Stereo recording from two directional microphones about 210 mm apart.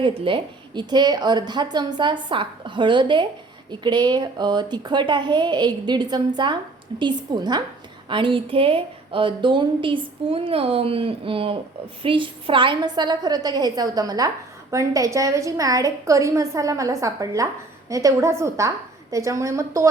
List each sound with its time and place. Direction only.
0.0 s a woman's voice: 25° right (ahead or behind)